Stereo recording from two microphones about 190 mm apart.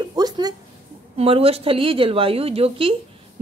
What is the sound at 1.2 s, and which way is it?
Speech, 30° right (ahead or behind).